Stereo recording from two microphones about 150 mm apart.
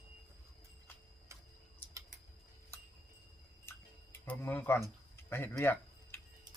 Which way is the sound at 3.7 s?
15° left (ahead or behind).